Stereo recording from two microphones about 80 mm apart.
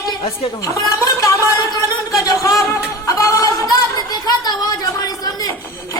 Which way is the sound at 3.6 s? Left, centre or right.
Left.